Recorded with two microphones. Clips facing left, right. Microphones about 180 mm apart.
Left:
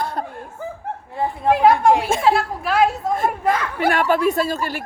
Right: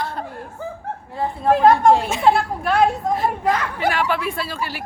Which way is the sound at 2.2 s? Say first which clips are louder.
Right 1 dB; centre (ahead or behind).